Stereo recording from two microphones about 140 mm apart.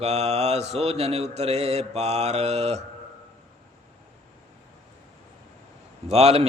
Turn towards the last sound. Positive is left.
turn(degrees=-50)  # may be behind; listen again after turning